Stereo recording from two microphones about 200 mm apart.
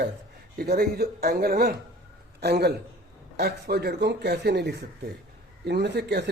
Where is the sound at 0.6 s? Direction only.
50° right (ahead or behind).